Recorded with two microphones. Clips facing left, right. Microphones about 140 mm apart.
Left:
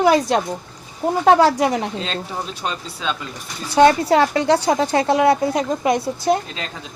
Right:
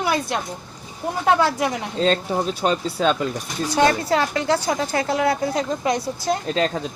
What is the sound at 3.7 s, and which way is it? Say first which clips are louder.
A woman's voice: left 5 dB; 30° left (ahead or behind).